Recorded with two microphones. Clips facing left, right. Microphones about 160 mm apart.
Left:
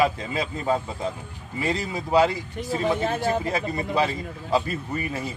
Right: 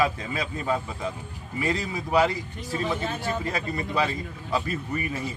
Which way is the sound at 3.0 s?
45° left (ahead or behind).